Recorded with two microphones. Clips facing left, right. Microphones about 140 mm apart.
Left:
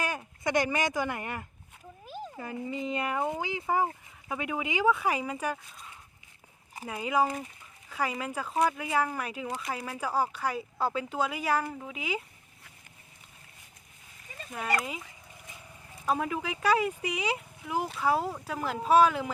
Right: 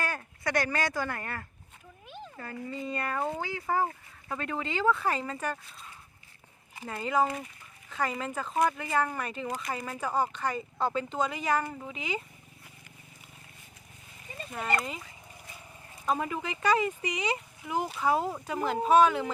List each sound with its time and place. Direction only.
0.0 s speech: 15° left (ahead or behind)
2.0 s a sound: 35° left (ahead or behind)
2.3 s speech: 15° left (ahead or behind)
6.8 s speech: 10° left (ahead or behind)
14.3 s speech: centre (ahead or behind)
16.0 s speech: centre (ahead or behind)